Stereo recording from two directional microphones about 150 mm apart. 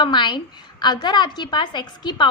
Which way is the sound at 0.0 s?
30° left (ahead or behind).